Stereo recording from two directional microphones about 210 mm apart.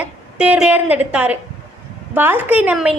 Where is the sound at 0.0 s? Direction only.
5° right (ahead or behind).